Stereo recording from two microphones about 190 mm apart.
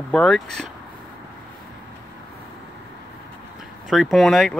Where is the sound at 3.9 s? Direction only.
Centre (ahead or behind).